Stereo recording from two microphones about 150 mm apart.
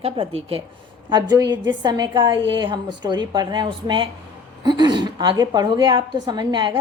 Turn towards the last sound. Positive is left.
turn(degrees=-30)  # may be behind; listen again after turning